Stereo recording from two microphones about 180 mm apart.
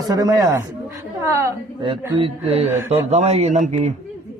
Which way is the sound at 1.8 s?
30° right (ahead or behind).